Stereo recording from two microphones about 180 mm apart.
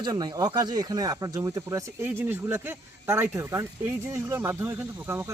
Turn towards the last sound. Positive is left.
turn(degrees=-15)  # may be behind; listen again after turning